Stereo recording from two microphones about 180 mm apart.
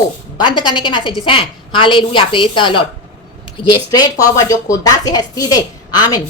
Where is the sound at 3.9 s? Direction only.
20° left (ahead or behind).